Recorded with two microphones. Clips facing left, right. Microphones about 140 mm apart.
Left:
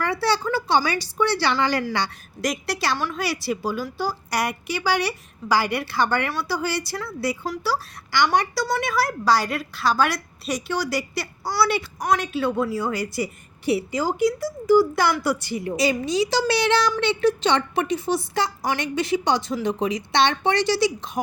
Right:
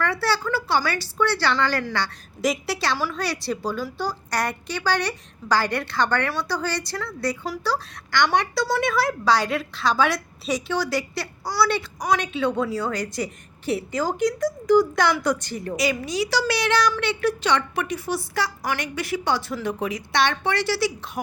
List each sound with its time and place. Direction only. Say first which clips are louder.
0.0 s a woman's voice: left 1 dB; 15° left (ahead or behind)
2.4 s a woman's voice: right 1 dB; centre (ahead or behind)
15.7 s a woman's voice: left 3 dB; 30° left (ahead or behind)